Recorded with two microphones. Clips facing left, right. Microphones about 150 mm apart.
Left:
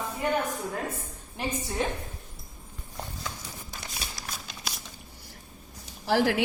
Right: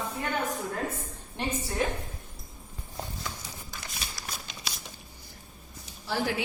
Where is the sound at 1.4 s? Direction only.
5° left (ahead or behind).